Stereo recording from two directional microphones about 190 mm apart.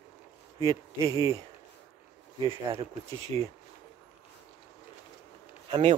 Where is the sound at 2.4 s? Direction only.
30° right (ahead or behind).